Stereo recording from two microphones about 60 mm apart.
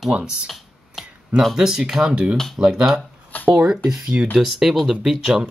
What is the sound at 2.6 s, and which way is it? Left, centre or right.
Speech, centre.